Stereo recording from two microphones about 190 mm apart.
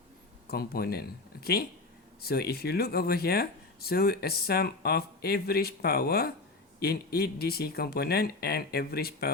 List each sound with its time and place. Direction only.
0.4 s speech: 55° left (ahead or behind)